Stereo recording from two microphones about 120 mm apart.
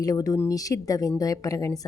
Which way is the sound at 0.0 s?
30° left (ahead or behind).